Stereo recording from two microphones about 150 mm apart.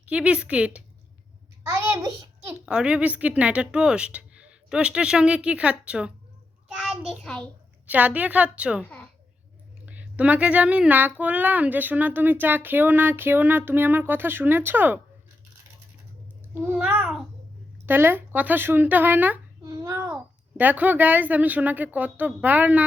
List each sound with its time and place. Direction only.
0.0 s speech: 10° right (ahead or behind)
1.6 s a sound: 20° right (ahead or behind)
2.6 s a child's voice: 5° right (ahead or behind)
7.9 s speech: 10° right (ahead or behind)
16.6 s a sound: 10° right (ahead or behind)
17.8 s speech: 15° right (ahead or behind)
19.6 s babbling: 25° right (ahead or behind)
20.6 s speech: 10° right (ahead or behind)